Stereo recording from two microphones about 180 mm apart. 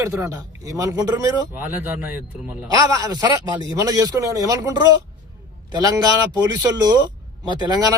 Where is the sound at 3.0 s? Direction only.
20° right (ahead or behind).